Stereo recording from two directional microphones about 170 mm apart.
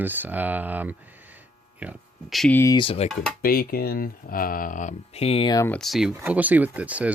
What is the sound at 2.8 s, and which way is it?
Speech, 35° left (ahead or behind).